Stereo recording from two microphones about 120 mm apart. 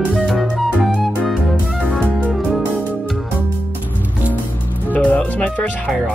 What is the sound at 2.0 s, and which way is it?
Music, 10° right (ahead or behind).